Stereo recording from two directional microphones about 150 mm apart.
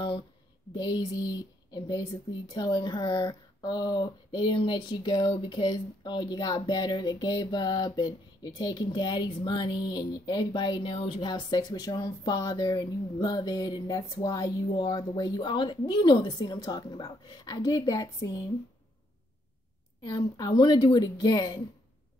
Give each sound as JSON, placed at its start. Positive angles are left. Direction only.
{"t": 0.7, "sound": "speech", "side_deg": 30}
{"t": 20.1, "sound": "speech", "side_deg": 25}